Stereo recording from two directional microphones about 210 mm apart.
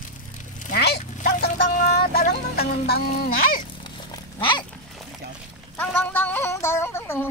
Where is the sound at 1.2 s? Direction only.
35° left (ahead or behind).